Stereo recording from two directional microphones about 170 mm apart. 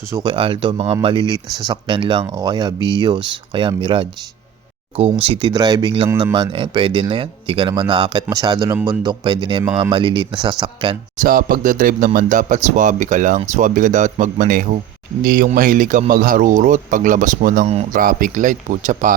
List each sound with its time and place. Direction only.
0.1 s speech: 25° right (ahead or behind)
5.2 s speech: 30° right (ahead or behind)
11.2 s speech: 55° right (ahead or behind)